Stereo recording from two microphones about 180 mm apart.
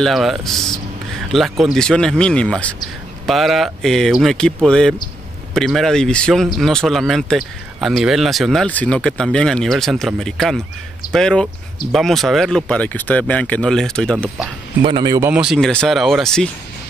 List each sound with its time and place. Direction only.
0.0 s speech: centre (ahead or behind)
14.8 s speech: 25° right (ahead or behind)
15.4 s speech: centre (ahead or behind)